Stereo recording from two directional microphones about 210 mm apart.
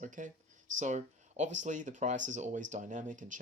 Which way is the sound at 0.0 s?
35° right (ahead or behind).